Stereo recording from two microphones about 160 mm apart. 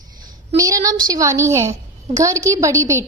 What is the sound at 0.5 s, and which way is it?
A woman's voice, 20° right (ahead or behind).